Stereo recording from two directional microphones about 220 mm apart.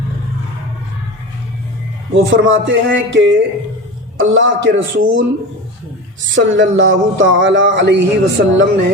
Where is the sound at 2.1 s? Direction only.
60° right (ahead or behind).